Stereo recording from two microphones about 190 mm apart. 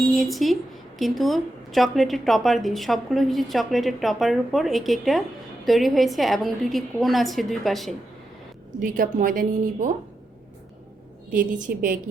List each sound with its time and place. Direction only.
0.2 s a woman's voice: centre (ahead or behind)
9.1 s speech: 45° right (ahead or behind)
11.3 s speech: 45° right (ahead or behind)